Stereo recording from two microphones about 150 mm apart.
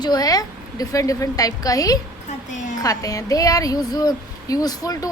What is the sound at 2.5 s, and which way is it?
Speech, 55° left (ahead or behind).